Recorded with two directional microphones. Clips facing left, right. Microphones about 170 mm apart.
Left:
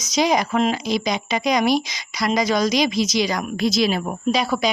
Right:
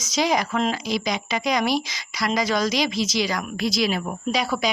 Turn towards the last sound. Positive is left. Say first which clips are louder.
# left 3 dB
turn(degrees=25)  # may be behind; listen again after turning